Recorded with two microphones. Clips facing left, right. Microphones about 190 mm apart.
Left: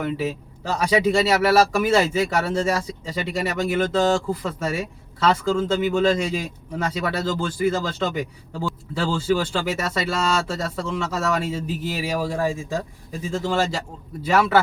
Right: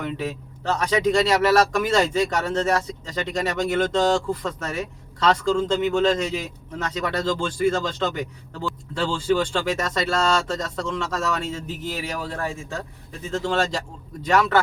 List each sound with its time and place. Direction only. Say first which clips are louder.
0.0 s speech: left 3 dB; 5° left (ahead or behind)